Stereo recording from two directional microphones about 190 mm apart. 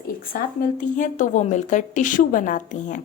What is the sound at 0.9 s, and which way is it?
A woman's voice, 40° left (ahead or behind).